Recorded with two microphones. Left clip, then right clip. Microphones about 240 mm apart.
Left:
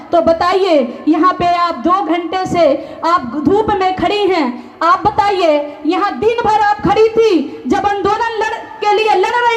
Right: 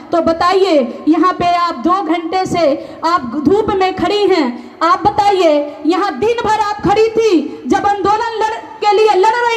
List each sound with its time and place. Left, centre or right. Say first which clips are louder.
0.1 s a woman's voice: left 1 dB; right; by 9.6 s centre